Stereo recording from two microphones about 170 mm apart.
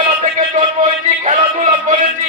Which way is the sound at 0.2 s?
50° right (ahead or behind).